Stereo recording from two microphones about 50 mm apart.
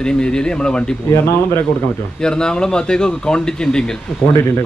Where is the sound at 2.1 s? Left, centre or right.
Centre.